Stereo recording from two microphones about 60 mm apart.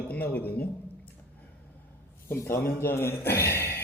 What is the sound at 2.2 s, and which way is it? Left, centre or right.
A man's voice, left.